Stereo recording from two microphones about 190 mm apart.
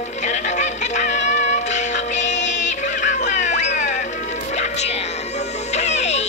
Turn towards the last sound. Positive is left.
turn(degrees=35)  # may be behind; listen again after turning